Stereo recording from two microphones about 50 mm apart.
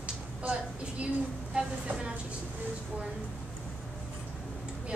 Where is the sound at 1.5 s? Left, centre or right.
Right.